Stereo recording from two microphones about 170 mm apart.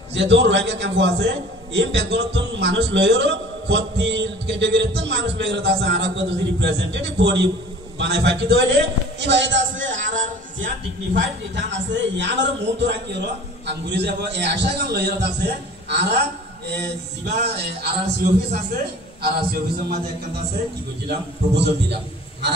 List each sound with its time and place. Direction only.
0.1 s a man's voice: 90° right
9.9 s music: 50° right (ahead or behind)
11.1 s a man's voice: 90° right; by 20.0 s 65° right (ahead or behind)